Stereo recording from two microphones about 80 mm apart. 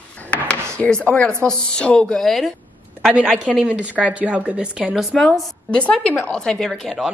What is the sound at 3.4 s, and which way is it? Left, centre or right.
A woman's voice, centre.